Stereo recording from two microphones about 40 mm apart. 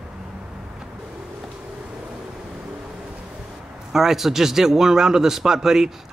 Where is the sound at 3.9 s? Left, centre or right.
Centre.